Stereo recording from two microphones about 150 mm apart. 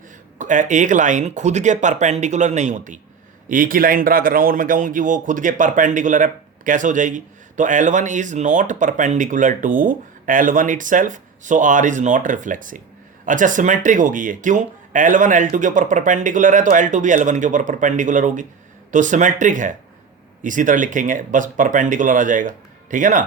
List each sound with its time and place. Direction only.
0.3 s speech: 55° right (ahead or behind)
3.5 s speech: 65° right (ahead or behind)